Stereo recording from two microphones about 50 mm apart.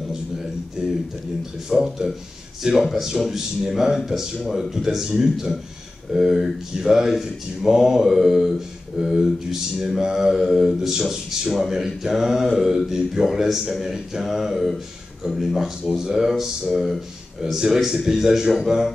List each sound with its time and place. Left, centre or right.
0.8 s mantra: centre
1.7 s mantra: centre
12.5 s speech: centre
17.4 s mantra: centre